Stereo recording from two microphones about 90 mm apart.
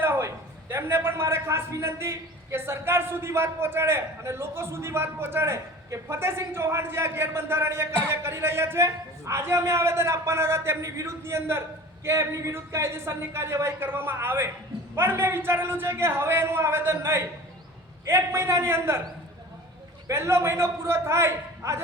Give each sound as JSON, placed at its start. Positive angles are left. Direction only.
{"t": 0.0, "sound": "a man's voice", "side_deg": -30}
{"t": 20.1, "sound": "a man's voice", "side_deg": -30}